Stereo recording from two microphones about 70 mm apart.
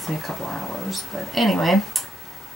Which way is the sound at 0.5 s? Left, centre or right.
Centre.